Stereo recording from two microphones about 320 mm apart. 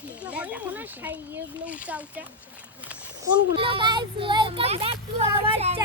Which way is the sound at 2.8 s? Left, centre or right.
Centre.